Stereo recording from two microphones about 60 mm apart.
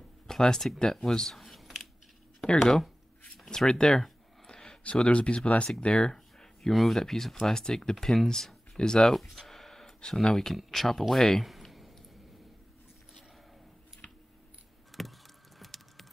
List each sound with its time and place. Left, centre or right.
0.3 s speech: centre
2.4 s speech: centre
3.3 s a sound: centre
5.8 s speech: centre
6.1 s speech: centre
14.9 s a sound: centre
15.6 s typing: centre